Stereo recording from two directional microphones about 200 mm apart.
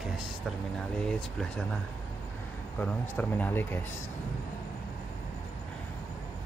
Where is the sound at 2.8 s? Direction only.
10° left (ahead or behind).